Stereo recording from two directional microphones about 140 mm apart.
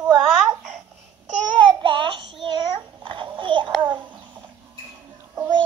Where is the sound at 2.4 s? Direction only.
30° right (ahead or behind).